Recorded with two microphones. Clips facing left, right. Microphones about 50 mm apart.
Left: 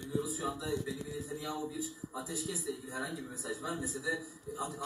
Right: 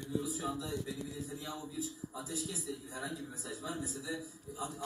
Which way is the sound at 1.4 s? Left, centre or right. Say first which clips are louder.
Left 4 dB; left.